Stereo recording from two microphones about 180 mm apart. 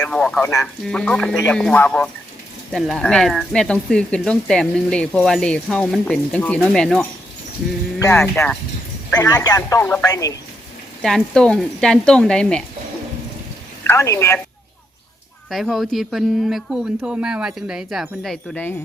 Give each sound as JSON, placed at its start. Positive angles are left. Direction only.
{"t": 0.0, "sound": "speech", "side_deg": 5}
{"t": 7.9, "sound": "speech", "side_deg": 15}
{"t": 11.0, "sound": "speech", "side_deg": 5}
{"t": 13.8, "sound": "speech", "side_deg": 15}
{"t": 15.4, "sound": "speech", "side_deg": 0}